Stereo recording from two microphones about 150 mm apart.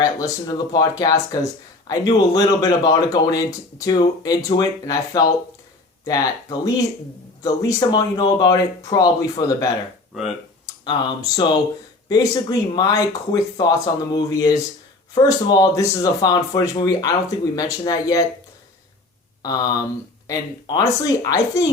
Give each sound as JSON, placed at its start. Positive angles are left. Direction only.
{"t": 0.0, "sound": "speech", "side_deg": 25}
{"t": 19.4, "sound": "speech", "side_deg": 25}